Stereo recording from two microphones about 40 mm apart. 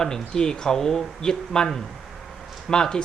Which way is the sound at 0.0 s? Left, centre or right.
Centre.